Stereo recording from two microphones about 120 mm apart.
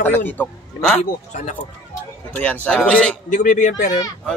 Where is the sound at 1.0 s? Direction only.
75° left (ahead or behind).